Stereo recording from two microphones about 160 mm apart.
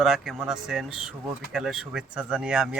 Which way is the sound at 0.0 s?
Centre (ahead or behind).